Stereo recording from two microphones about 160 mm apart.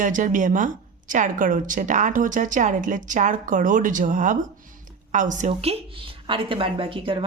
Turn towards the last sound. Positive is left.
turn(degrees=-35)  # may be behind; listen again after turning